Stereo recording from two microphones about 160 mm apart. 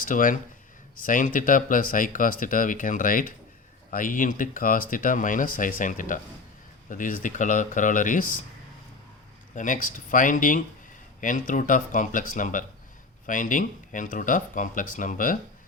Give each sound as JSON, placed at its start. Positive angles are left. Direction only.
{"t": 0.0, "sound": "speech", "side_deg": 55}
{"t": 9.6, "sound": "speech", "side_deg": 55}